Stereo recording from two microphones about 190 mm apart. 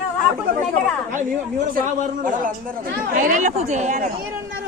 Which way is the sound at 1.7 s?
45° right (ahead or behind).